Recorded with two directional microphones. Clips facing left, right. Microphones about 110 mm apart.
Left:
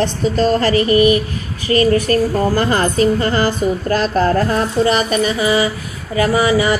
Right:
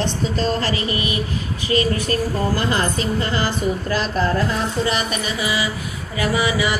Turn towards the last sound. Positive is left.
turn(degrees=45)  # may be behind; listen again after turning